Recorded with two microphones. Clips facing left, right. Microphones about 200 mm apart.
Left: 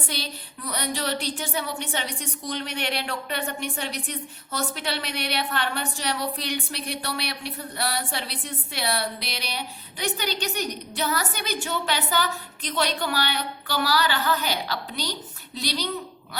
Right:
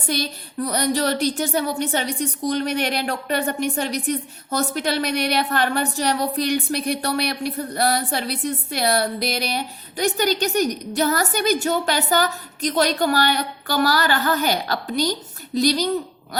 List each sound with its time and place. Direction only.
0.1 s a woman's voice: 45° right (ahead or behind)